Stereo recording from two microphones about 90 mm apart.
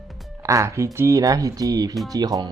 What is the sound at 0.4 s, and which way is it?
Speech, 35° right (ahead or behind).